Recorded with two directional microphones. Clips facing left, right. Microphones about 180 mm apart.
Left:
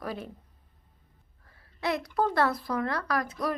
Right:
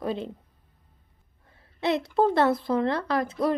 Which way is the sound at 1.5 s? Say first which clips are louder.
Right 5 dB; 25° right (ahead or behind).